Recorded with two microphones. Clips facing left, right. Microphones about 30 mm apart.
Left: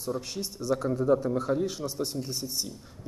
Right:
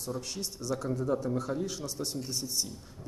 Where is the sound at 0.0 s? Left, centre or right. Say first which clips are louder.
Left 4 dB; centre.